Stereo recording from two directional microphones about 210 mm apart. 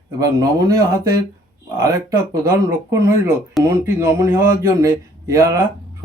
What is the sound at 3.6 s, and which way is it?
Speech, 15° right (ahead or behind).